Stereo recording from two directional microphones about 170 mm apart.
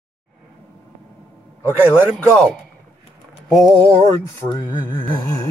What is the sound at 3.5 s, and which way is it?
Speech, 20° left (ahead or behind).